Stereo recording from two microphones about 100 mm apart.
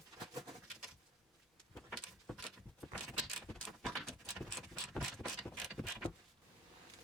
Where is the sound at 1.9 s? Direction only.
10° left (ahead or behind).